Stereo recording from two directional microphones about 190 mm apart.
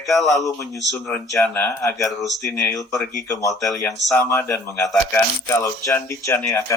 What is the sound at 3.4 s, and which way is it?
Speech, 15° left (ahead or behind).